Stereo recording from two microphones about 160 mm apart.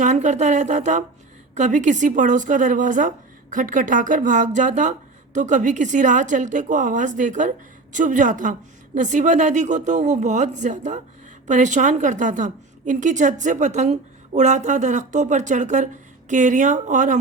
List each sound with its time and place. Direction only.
0.0 s a woman's voice: 50° right (ahead or behind)